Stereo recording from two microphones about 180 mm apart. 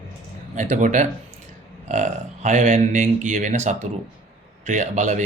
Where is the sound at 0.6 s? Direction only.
40° right (ahead or behind).